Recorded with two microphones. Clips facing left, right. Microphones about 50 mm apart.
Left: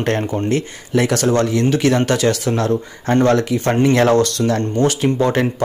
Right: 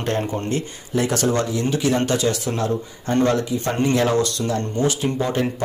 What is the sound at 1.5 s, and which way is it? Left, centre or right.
Speech, left.